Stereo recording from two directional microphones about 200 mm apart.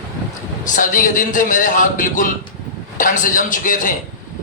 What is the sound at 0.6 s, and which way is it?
A man's voice, 40° left (ahead or behind).